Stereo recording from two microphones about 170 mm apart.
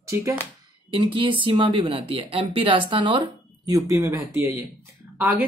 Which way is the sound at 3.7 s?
20° right (ahead or behind).